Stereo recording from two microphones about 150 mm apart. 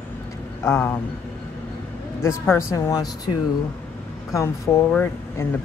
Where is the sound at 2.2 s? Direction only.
15° left (ahead or behind).